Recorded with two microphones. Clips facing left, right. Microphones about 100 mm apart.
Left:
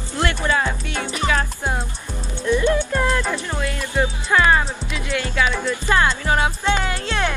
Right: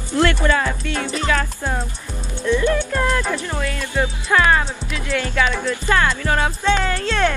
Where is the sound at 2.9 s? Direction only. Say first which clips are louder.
Right 1 dB; centre (ahead or behind).